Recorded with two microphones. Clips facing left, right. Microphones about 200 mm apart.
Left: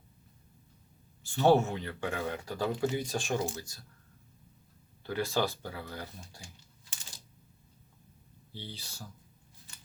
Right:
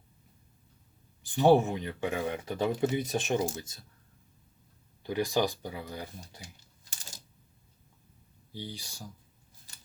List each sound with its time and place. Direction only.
1.2 s speech: 15° right (ahead or behind)
5.0 s speech: 15° right (ahead or behind)
8.5 s speech: 15° right (ahead or behind)
9.7 s a sound: 35° right (ahead or behind)